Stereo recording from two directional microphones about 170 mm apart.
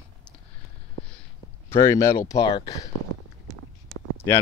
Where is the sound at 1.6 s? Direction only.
15° left (ahead or behind).